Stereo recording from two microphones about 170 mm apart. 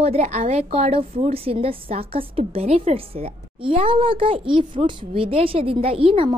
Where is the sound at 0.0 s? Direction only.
40° right (ahead or behind).